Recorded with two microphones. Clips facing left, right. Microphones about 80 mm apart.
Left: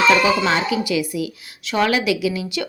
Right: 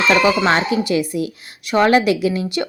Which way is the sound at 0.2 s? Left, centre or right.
Right.